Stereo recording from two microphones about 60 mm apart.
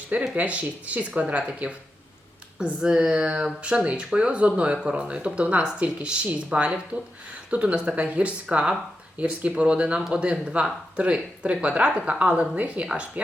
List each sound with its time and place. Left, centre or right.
0.3 s speech: right